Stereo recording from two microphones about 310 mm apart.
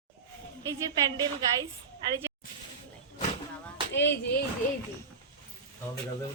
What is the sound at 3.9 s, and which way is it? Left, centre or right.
Speech, left.